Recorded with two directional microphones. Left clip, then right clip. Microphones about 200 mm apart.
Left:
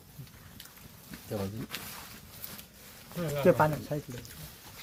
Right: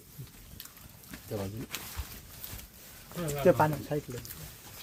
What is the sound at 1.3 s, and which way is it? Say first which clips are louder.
Speech: left 1 dB; 25° left (ahead or behind).